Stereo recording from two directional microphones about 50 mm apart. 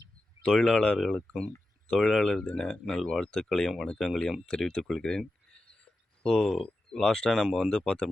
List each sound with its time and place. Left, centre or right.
0.4 s speech: centre
0.9 s speech: centre
4.8 s speech: centre
5.5 s a sound: centre
6.3 s speech: centre